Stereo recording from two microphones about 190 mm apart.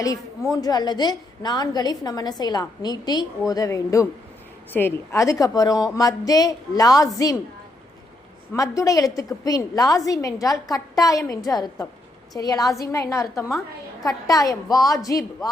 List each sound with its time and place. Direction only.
0.5 s a woman's voice: 20° left (ahead or behind)
8.5 s a woman's voice: 15° left (ahead or behind)